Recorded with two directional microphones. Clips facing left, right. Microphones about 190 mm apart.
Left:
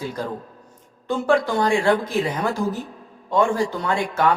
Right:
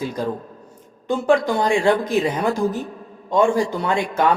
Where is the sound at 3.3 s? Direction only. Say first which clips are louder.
Right 2 dB; 15° right (ahead or behind).